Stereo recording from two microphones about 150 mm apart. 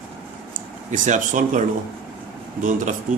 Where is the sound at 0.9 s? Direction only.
55° right (ahead or behind).